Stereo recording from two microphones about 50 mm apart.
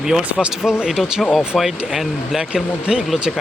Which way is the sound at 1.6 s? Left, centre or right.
Centre.